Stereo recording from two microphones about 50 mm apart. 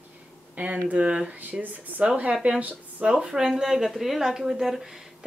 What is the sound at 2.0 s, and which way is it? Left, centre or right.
Speech, right.